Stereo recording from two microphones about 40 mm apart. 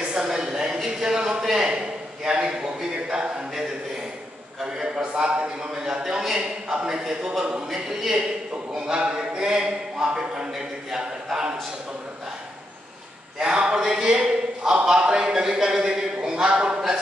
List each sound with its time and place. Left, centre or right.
0.0 s a woman's voice: right
0.7 s a man's voice: centre
4.6 s a man's voice: right
5.8 s a man's voice: centre
8.7 s a man's voice: centre
13.4 s a man's voice: right